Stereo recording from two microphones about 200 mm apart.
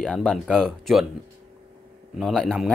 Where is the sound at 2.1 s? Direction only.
Centre (ahead or behind).